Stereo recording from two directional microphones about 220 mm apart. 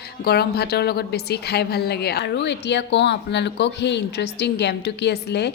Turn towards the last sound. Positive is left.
turn(degrees=50)  # may be behind; listen again after turning